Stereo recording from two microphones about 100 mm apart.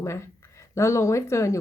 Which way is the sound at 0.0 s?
25° left (ahead or behind).